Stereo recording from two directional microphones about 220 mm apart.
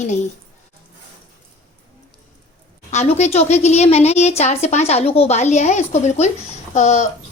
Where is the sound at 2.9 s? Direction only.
30° left (ahead or behind).